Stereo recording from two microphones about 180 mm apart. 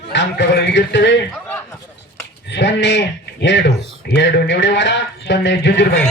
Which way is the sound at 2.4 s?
80° left.